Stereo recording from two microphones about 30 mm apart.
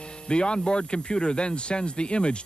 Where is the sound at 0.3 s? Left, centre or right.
Left.